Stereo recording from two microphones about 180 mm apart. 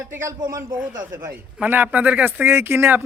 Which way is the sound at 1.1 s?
10° right (ahead or behind).